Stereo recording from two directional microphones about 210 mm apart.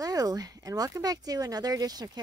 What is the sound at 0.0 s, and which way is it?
Speech, 15° right (ahead or behind).